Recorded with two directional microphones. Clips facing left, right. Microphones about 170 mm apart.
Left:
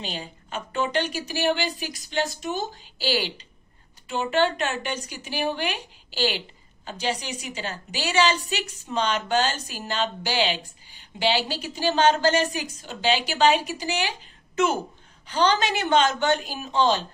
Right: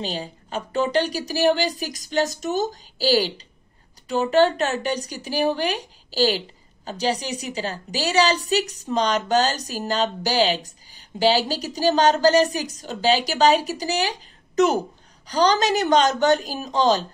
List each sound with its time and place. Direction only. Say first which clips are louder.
0.0 s speech: right 5 dB; 35° right (ahead or behind)